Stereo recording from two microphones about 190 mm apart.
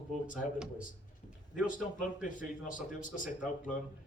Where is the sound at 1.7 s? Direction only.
45° left (ahead or behind).